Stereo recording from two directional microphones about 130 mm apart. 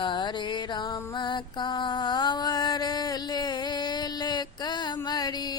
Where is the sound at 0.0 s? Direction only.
35° left (ahead or behind).